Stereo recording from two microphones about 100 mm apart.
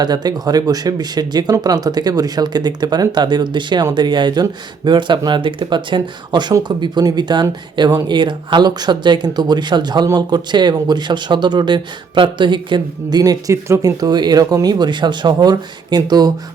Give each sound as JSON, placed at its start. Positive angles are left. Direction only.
{"t": 0.0, "sound": "speech", "side_deg": -45}
{"t": 13.5, "sound": "speech", "side_deg": -30}